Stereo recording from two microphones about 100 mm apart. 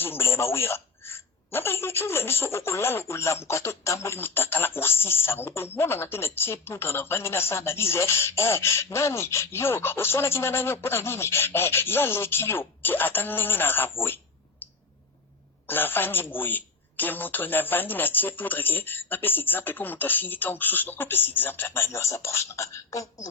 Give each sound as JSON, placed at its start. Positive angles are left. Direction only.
{"t": 0.0, "sound": "a woman's voice", "side_deg": 25}
{"t": 15.6, "sound": "a woman's voice", "side_deg": 20}